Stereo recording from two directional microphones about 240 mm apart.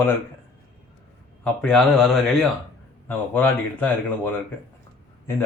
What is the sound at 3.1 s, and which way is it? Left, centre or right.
Speech, centre.